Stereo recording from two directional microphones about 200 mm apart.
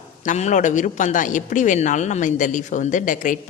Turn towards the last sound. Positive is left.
turn(degrees=40)  # may be behind; listen again after turning